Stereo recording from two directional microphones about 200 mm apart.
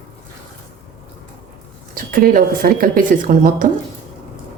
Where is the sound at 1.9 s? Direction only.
45° right (ahead or behind).